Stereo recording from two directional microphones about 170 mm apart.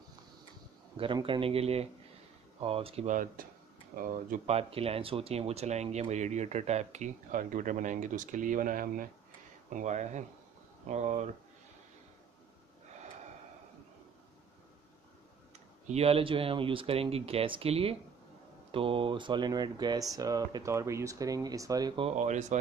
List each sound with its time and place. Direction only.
0.9 s speech: 30° right (ahead or behind)
3.1 s speech: 50° right (ahead or behind)
4.5 s speech: 35° right (ahead or behind); by 9.1 s 55° right (ahead or behind)
9.8 s speech: 45° right (ahead or behind)
15.9 s speech: 35° right (ahead or behind)
22.1 s speech: 45° right (ahead or behind)